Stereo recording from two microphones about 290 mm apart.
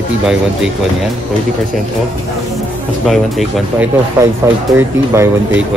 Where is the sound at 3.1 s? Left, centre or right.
Centre.